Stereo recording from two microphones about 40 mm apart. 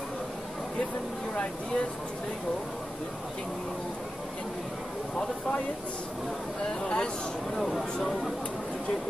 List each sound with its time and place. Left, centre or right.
5.1 s speech: left
6.6 s speech: centre
7.5 s speech: centre